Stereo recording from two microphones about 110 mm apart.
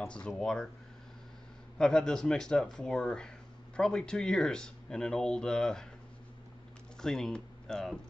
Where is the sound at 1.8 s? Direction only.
5° left (ahead or behind).